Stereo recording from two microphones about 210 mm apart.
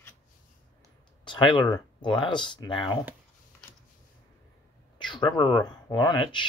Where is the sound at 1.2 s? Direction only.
25° left (ahead or behind).